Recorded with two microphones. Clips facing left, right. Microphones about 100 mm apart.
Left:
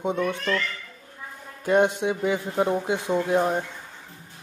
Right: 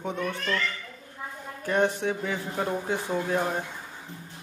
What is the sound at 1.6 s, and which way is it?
Speech, 20° left (ahead or behind).